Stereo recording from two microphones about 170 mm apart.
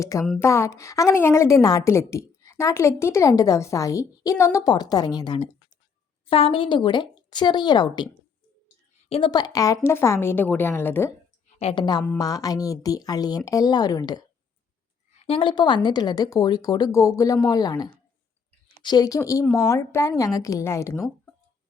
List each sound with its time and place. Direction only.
0.0 s a woman's voice: 20° left (ahead or behind)
11.6 s speech: 30° left (ahead or behind)
15.3 s a woman's voice: 30° left (ahead or behind)